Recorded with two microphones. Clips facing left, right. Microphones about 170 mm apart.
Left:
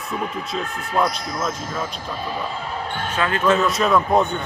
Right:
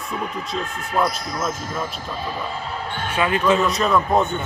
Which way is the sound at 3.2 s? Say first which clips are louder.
Right 1 dB; 15° right (ahead or behind).